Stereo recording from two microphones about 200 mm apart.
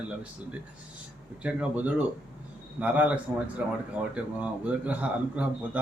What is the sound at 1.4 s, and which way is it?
A man's voice, 5° right (ahead or behind).